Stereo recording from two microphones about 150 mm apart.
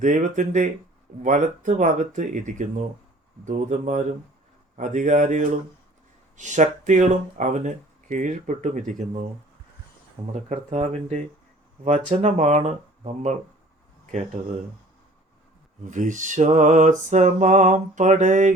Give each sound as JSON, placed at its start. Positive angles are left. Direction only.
{"t": 0.0, "sound": "mantra", "side_deg": -55}
{"t": 3.4, "sound": "speech", "side_deg": -55}
{"t": 4.8, "sound": "mantra", "side_deg": -55}
{"t": 6.3, "sound": "speech", "side_deg": -55}
{"t": 10.3, "sound": "speech", "side_deg": -50}
{"t": 15.8, "sound": "mantra", "side_deg": -55}